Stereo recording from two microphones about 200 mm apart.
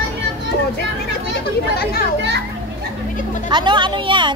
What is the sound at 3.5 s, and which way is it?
Speech, 25° right (ahead or behind).